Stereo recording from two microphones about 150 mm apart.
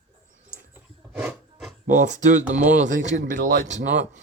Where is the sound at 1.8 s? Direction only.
55° right (ahead or behind).